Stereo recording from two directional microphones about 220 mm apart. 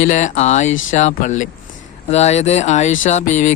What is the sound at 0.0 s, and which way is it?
Speech, 35° left (ahead or behind).